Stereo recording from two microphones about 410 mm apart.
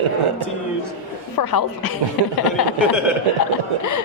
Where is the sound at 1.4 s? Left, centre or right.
Left.